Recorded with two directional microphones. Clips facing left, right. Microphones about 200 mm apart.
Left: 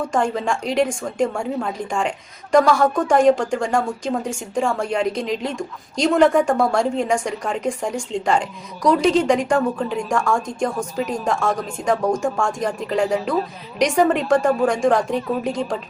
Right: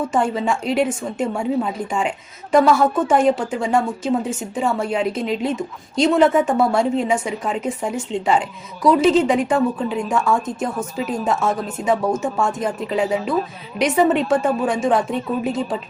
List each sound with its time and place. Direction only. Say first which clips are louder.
0.1 s a woman's voice: right 1 dB; 5° right (ahead or behind)